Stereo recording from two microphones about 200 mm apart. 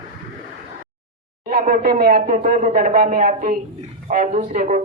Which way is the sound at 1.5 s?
40° right (ahead or behind).